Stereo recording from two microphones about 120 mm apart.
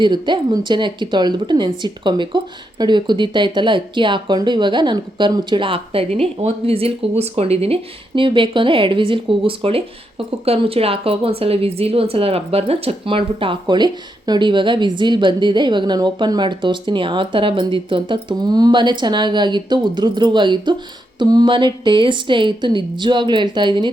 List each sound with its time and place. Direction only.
0.0 s speech: 40° right (ahead or behind)